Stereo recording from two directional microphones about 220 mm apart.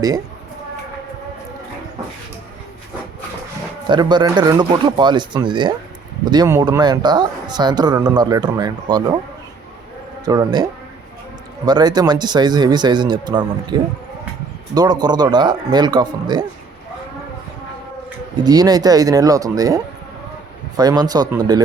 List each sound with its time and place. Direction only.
3.8 s speech: 20° right (ahead or behind)
10.2 s speech: 20° right (ahead or behind)
18.3 s speech: 15° right (ahead or behind)